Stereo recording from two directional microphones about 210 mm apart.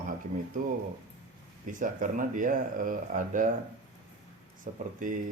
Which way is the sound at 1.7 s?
40° right (ahead or behind).